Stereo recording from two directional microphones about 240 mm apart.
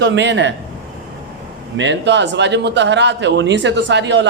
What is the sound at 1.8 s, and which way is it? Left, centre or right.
Speech, right.